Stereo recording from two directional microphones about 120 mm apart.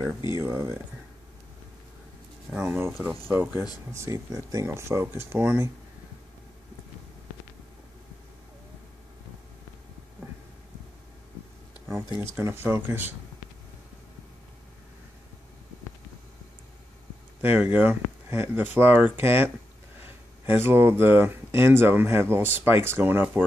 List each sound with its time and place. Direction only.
0.3 s speech: 25° right (ahead or behind)
2.5 s speech: 20° right (ahead or behind)
12.4 s speech: 20° right (ahead or behind)
17.4 s speech: 15° right (ahead or behind)